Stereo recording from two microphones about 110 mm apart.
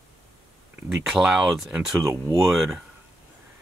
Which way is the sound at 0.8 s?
5° right (ahead or behind).